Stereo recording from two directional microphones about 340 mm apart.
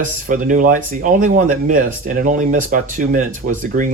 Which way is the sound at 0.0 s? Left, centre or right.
Right.